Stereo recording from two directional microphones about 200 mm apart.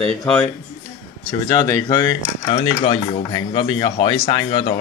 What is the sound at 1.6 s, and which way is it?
Speech, 15° left (ahead or behind).